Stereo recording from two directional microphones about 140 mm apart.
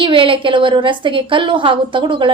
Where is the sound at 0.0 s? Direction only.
35° right (ahead or behind).